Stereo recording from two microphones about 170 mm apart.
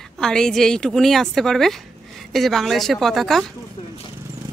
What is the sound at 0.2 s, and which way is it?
A woman's voice, 5° left (ahead or behind).